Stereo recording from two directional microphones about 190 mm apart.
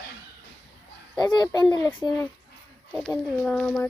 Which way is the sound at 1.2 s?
20° left (ahead or behind).